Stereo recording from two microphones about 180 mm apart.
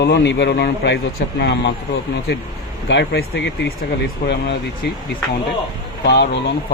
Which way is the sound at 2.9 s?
70° left (ahead or behind).